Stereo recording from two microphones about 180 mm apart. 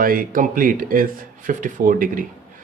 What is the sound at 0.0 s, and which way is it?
Speech, 50° right (ahead or behind).